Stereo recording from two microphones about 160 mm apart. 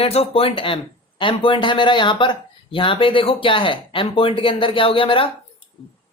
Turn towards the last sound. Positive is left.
turn(degrees=35)  # may be behind; listen again after turning